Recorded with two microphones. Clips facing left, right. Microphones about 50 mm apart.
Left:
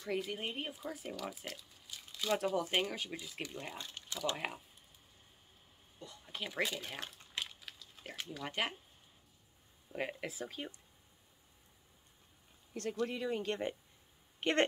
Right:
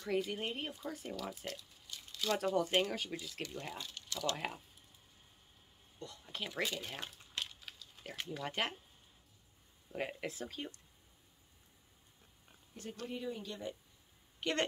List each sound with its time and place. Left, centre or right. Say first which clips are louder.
0.0 s speech: right 2 dB; centre
5.9 s speech: right 1 dB; centre
9.9 s speech: even; centre
13.0 s speech: left 5 dB; left
14.4 s a woman's voice: left 4 dB; left